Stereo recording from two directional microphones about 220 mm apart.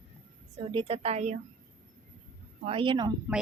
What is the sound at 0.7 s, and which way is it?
Speech, 25° right (ahead or behind).